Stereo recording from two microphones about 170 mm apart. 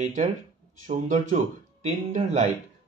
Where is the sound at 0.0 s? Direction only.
45° right (ahead or behind).